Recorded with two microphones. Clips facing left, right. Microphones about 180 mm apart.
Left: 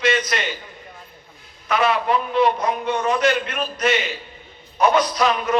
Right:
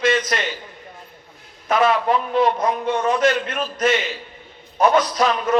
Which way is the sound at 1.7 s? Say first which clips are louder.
Right 2 dB; 45° right (ahead or behind).